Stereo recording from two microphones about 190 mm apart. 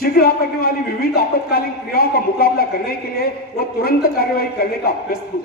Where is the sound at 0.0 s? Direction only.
50° left (ahead or behind).